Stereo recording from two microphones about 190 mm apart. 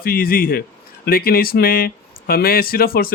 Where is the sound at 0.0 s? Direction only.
50° left (ahead or behind).